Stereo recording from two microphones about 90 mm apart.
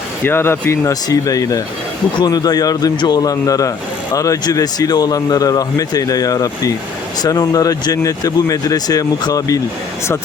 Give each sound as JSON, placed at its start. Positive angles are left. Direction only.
{"t": 0.3, "sound": "speech", "side_deg": 25}
{"t": 1.0, "sound": "speech", "side_deg": 40}